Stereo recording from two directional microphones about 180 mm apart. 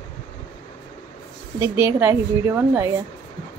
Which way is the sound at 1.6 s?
10° right (ahead or behind).